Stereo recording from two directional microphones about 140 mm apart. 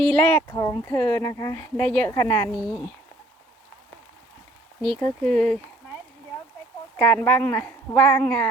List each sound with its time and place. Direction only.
0.0 s speech: 10° left (ahead or behind)
0.4 s speech: 25° left (ahead or behind)
2.6 s speech: 5° left (ahead or behind)
4.9 s speech: 10° left (ahead or behind)
6.9 s speech: 10° left (ahead or behind)